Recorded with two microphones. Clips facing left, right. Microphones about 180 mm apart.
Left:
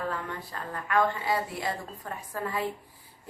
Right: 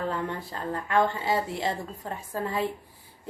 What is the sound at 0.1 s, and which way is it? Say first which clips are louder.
A woman's voice: right 4 dB; 25° right (ahead or behind).